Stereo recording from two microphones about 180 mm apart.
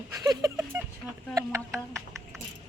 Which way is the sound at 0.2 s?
20° right (ahead or behind).